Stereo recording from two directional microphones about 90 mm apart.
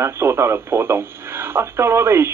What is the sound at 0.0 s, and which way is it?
Speech, 30° right (ahead or behind).